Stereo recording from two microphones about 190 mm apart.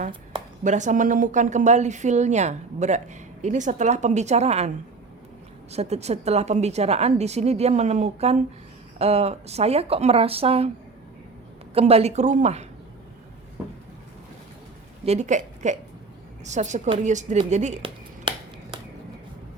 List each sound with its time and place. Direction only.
0.6 s a woman's voice: 40° right (ahead or behind)
5.7 s a woman's voice: 35° right (ahead or behind)
11.7 s a woman's voice: 30° right (ahead or behind)
15.0 s a woman's voice: 35° right (ahead or behind)